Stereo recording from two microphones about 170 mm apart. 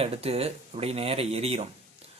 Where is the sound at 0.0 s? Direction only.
35° right (ahead or behind).